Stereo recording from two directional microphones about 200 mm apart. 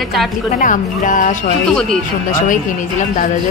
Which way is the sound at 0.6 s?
40° left (ahead or behind).